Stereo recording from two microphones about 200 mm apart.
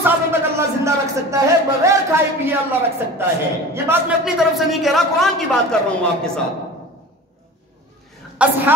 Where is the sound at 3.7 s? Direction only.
10° right (ahead or behind).